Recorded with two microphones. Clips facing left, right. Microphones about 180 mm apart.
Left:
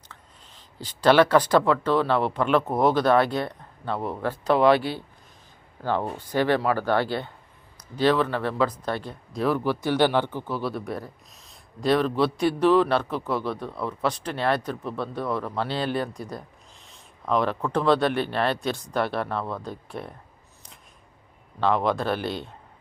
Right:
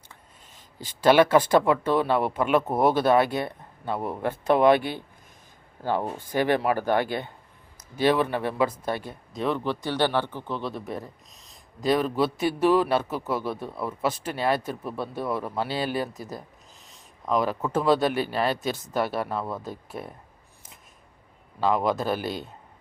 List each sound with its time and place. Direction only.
0.5 s a sound: 45° right (ahead or behind)
1.0 s speech: 10° right (ahead or behind)
9.4 s speech: 5° left (ahead or behind)
21.6 s speech: 5° right (ahead or behind)